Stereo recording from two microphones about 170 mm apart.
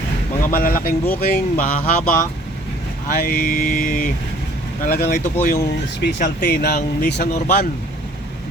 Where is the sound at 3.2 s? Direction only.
55° left (ahead or behind).